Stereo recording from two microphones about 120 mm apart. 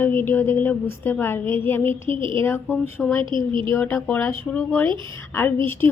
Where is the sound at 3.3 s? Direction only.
40° right (ahead or behind).